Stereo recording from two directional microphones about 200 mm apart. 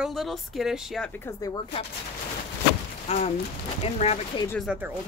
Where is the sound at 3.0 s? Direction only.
30° left (ahead or behind).